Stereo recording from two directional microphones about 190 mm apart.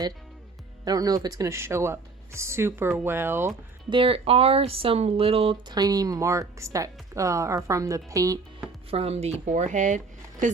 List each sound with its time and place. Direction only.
0.9 s speech: 20° right (ahead or behind)
3.8 s speech: 30° right (ahead or behind)
8.9 s speech: 30° right (ahead or behind)